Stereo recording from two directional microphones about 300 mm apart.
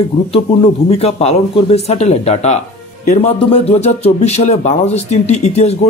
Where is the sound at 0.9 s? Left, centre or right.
Centre.